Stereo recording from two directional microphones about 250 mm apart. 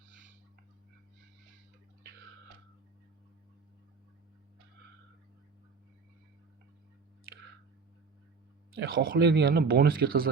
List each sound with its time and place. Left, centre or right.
8.7 s speech: right